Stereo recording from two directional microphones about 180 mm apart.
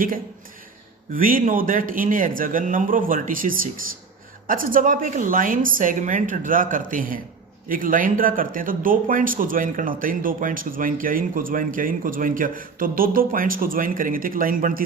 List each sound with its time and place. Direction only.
1.1 s a man's voice: 50° right (ahead or behind)